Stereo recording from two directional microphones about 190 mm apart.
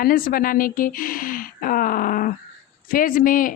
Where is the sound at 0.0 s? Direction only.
50° left (ahead or behind).